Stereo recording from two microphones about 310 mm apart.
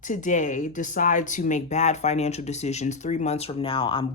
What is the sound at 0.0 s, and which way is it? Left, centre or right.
Speech, left.